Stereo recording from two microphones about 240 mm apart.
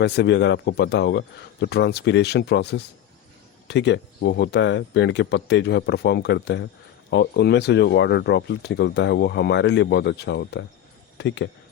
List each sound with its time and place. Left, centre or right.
0.0 s speech: left